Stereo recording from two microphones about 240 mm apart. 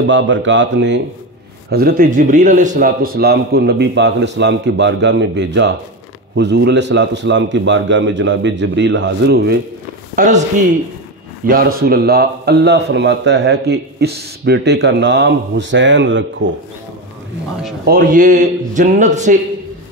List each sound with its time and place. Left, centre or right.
0.0 s a man's voice: right
10.1 s speech: right
11.4 s speech: right
17.8 s a man's voice: right